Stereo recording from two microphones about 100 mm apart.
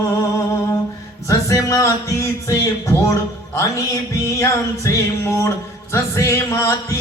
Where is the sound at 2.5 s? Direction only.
30° left (ahead or behind).